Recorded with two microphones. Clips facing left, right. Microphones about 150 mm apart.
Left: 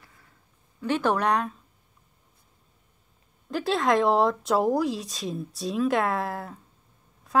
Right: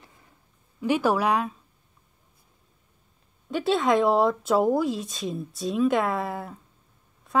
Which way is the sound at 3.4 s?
Centre (ahead or behind).